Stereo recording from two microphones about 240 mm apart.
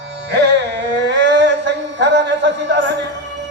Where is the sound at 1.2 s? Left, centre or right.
Right.